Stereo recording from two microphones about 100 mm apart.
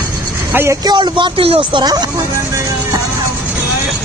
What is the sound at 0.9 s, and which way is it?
Speech, 50° right (ahead or behind).